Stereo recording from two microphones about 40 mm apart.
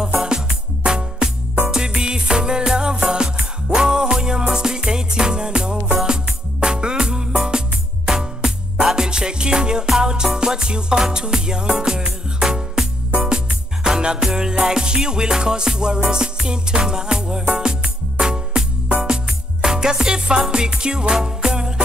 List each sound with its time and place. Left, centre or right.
0.0 s music: centre
13.8 s music: centre